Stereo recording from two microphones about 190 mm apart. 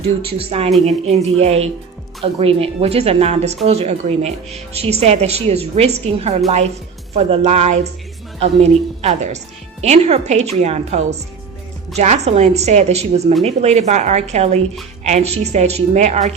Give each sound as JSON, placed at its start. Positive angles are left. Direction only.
{"t": 0.0, "sound": "a woman's voice", "side_deg": -30}